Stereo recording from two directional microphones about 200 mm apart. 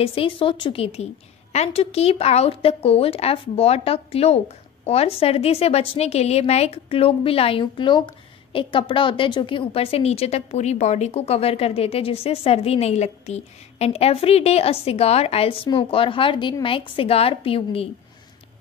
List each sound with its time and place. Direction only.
0.0 s a woman's voice: 25° left (ahead or behind)